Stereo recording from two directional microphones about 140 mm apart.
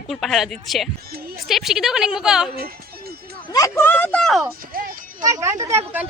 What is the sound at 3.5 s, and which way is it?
Speech, 20° left (ahead or behind).